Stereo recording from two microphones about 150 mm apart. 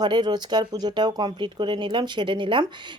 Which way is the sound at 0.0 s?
30° right (ahead or behind).